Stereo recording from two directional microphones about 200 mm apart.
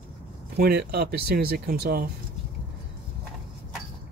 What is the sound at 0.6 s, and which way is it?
Speech, 55° right (ahead or behind).